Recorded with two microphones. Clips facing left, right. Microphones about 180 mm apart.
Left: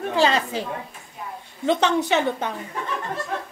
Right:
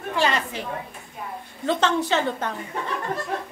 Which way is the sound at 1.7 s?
15° left (ahead or behind).